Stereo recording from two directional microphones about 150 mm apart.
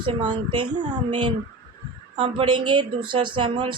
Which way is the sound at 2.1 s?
35° right (ahead or behind).